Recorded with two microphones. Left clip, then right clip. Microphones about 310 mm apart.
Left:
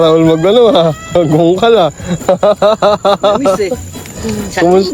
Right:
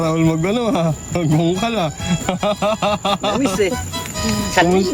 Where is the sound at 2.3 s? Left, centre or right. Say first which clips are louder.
Left 11 dB; right.